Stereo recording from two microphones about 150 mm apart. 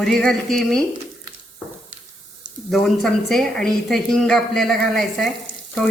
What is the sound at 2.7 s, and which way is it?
Speech, centre (ahead or behind).